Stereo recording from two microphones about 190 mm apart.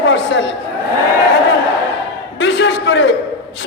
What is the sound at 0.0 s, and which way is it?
Chatter, 75° left (ahead or behind).